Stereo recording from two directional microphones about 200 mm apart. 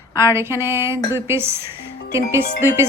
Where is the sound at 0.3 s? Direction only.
10° right (ahead or behind).